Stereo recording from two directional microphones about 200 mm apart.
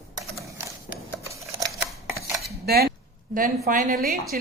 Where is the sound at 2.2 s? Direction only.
15° right (ahead or behind).